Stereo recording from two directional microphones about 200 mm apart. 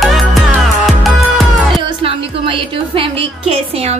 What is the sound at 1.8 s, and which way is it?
A woman's voice, 25° right (ahead or behind).